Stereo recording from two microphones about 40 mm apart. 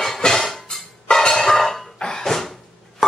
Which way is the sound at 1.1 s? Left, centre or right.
Centre.